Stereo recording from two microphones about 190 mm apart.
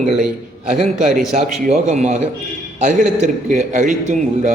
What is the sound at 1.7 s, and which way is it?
A man's voice, 35° right (ahead or behind).